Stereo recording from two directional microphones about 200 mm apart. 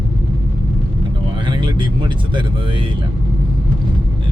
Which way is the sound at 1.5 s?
25° right (ahead or behind).